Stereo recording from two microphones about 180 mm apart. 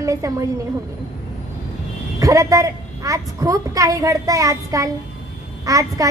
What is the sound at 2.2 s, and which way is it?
A woman's voice, 20° right (ahead or behind).